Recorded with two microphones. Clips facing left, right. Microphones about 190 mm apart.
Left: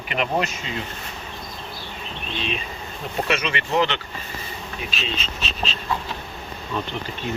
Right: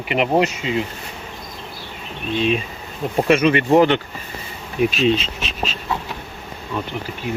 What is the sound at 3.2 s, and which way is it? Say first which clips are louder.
Speech: right 12 dB; 50° right (ahead or behind).